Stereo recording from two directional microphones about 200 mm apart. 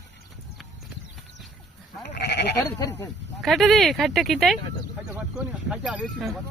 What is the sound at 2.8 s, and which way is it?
Speech, 15° left (ahead or behind).